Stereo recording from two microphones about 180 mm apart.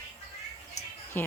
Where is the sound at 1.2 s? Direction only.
10° left (ahead or behind).